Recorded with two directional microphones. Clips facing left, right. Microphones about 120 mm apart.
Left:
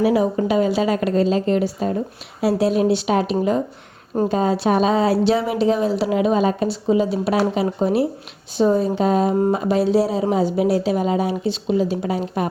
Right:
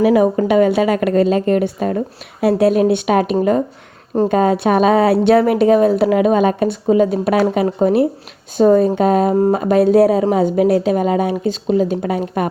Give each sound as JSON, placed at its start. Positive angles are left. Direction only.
{"t": 0.0, "sound": "speech", "side_deg": -60}